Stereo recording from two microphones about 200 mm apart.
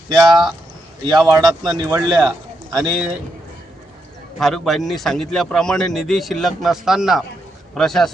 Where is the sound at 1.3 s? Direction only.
20° right (ahead or behind).